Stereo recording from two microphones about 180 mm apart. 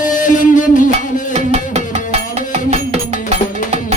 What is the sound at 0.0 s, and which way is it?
Music, 45° left (ahead or behind).